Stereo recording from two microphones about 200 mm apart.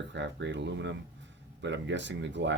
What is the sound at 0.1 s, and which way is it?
Speech, 60° right (ahead or behind).